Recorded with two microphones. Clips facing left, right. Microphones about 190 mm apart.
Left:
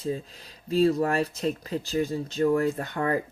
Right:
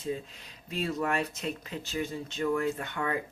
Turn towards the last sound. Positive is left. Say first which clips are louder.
# left 6 dB
turn(degrees=40)  # may be behind; listen again after turning